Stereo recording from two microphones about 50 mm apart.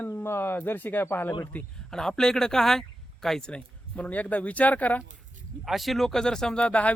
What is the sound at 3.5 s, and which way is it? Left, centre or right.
Speech, left.